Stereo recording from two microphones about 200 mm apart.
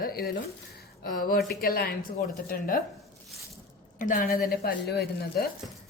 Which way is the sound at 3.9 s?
45° left (ahead or behind).